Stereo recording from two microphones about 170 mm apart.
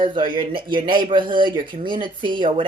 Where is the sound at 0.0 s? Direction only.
30° right (ahead or behind).